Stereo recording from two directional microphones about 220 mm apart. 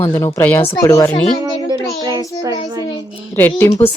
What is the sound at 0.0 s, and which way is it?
Speech, 10° left (ahead or behind).